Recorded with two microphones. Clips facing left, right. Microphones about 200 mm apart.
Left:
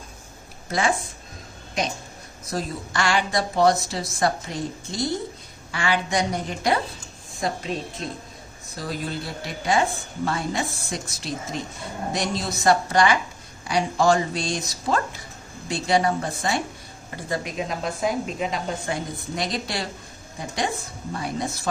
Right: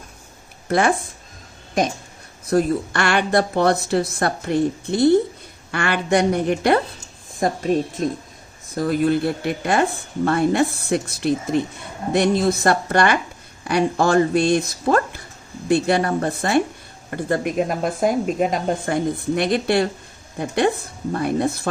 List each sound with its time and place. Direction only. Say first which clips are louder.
0.7 s speech: right 6 dB; 60° right (ahead or behind)
2.5 s speech: right 11 dB; 60° right (ahead or behind)